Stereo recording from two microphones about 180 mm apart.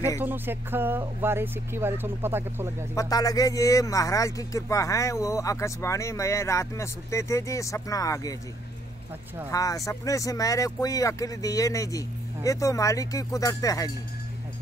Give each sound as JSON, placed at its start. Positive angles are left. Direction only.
{"t": 0.2, "sound": "speech", "side_deg": -10}
{"t": 2.9, "sound": "speech", "side_deg": 20}
{"t": 9.5, "sound": "speech", "side_deg": 20}